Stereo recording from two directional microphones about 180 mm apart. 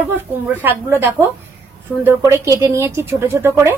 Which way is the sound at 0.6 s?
10° right (ahead or behind).